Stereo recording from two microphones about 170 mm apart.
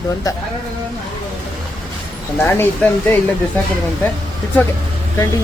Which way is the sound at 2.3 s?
10° left (ahead or behind).